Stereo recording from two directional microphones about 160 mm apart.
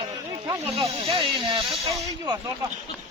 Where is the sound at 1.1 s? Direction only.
30° right (ahead or behind).